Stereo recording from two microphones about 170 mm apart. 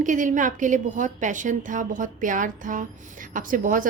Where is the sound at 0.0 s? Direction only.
50° right (ahead or behind).